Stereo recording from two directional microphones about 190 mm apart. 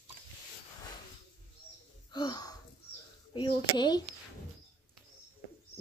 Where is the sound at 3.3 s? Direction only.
25° left (ahead or behind).